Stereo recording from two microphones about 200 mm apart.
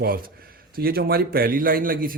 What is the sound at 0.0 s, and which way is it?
Speech, 45° right (ahead or behind).